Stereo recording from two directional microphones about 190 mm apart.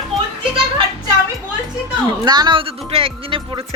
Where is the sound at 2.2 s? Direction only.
20° right (ahead or behind).